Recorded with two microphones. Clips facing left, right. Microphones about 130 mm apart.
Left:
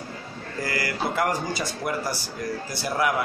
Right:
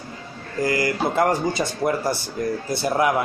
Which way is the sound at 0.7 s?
20° right (ahead or behind).